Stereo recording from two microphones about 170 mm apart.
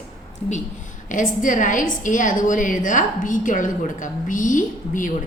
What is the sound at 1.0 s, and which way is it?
A woman's voice, 50° left (ahead or behind).